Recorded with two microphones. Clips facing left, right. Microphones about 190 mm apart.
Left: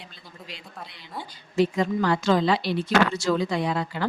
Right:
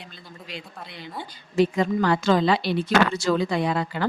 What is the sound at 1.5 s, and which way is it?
A woman's voice, 60° right (ahead or behind).